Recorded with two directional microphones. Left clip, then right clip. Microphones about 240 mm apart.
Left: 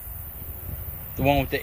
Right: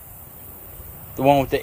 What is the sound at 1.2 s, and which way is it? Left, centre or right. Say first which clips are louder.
Speech: right 6 dB; centre.